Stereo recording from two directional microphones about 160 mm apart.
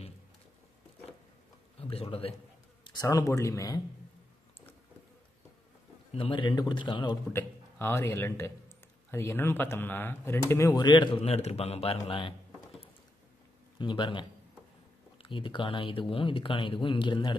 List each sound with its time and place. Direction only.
1.8 s a man's voice: 35° left (ahead or behind)
2.8 s speech: 25° left (ahead or behind)
6.1 s speech: 30° left (ahead or behind)
7.3 s a man's voice: 15° left (ahead or behind); by 12.4 s 35° left (ahead or behind)
13.7 s speech: 30° left (ahead or behind)
15.2 s speech: 30° left (ahead or behind)